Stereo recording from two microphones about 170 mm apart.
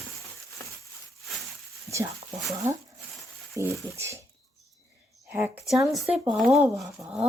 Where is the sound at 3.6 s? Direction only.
20° left (ahead or behind).